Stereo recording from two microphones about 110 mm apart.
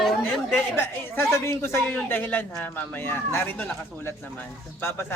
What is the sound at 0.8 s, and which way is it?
A woman's voice, 20° left (ahead or behind).